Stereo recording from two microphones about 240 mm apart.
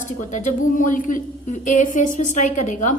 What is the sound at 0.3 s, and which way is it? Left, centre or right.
Speech, left.